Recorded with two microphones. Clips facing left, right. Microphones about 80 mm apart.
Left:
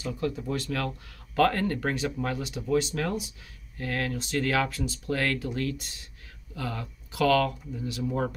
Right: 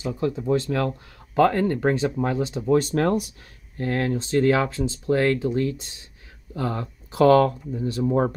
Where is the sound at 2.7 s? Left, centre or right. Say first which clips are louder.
Right 6 dB; right.